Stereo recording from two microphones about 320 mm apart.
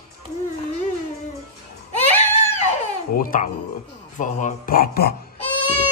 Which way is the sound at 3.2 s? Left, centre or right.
Left.